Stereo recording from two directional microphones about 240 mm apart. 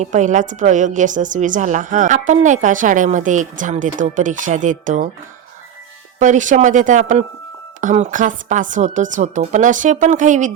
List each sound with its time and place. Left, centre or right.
0.0 s a woman's voice: right
6.1 s a woman's voice: right